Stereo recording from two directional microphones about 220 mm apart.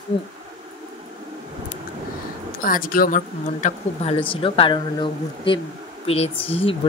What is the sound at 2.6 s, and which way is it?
Speech, 40° left (ahead or behind).